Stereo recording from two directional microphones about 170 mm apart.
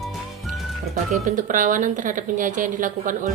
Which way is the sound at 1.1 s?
50° right (ahead or behind).